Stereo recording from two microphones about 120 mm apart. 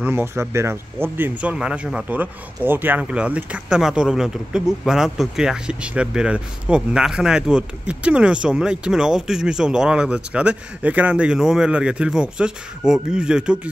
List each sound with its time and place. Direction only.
0.0 s speech: 20° right (ahead or behind)